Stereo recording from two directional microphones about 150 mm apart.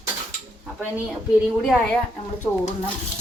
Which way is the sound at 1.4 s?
Centre (ahead or behind).